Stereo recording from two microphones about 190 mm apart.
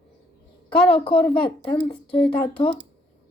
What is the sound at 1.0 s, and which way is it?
A woman's voice, 30° left (ahead or behind).